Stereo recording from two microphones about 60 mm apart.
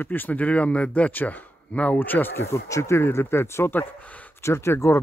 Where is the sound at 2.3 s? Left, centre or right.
Left.